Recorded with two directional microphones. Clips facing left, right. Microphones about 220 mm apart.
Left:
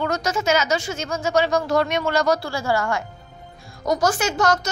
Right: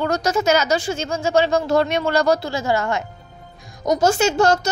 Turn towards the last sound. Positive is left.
turn(degrees=-30)  # may be behind; listen again after turning